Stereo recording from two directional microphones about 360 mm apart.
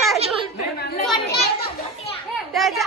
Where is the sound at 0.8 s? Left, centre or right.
Left.